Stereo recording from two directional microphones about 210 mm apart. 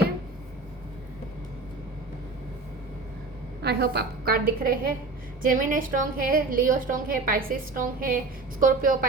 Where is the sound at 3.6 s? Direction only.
50° right (ahead or behind).